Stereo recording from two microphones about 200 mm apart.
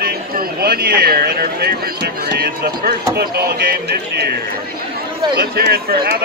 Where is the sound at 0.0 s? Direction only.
45° right (ahead or behind).